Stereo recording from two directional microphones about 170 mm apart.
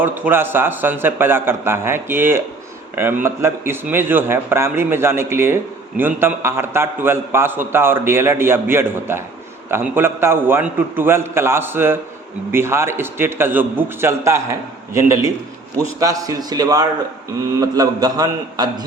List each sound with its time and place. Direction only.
0.0 s a man's voice: 10° right (ahead or behind)